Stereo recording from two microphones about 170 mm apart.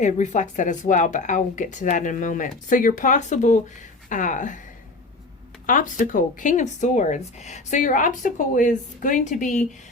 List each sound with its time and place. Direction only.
0.0 s speech: 45° left (ahead or behind)
5.6 s speech: 50° left (ahead or behind)